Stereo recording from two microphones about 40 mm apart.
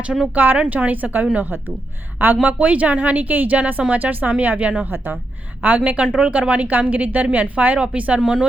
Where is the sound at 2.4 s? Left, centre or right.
Right.